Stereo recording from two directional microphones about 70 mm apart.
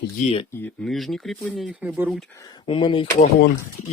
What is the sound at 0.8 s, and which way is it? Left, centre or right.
Speech, centre.